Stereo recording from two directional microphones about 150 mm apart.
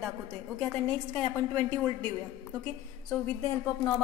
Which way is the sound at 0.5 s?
5° left (ahead or behind).